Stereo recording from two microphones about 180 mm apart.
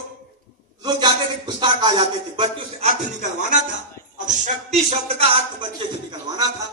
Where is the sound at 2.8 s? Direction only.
35° right (ahead or behind).